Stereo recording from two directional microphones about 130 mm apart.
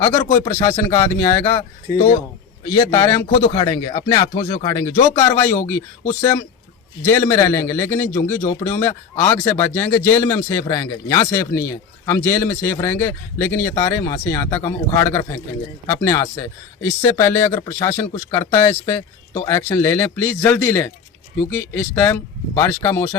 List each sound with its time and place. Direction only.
0.0 s speech: 20° left (ahead or behind)
2.6 s a man's voice: 25° left (ahead or behind)